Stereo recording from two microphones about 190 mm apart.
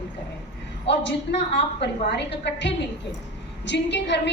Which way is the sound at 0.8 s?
65° left (ahead or behind).